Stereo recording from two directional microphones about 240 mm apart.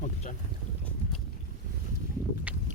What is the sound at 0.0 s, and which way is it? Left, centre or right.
Boat, left.